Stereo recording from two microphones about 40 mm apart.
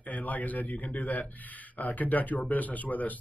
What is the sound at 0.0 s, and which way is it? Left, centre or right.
A man's voice, left.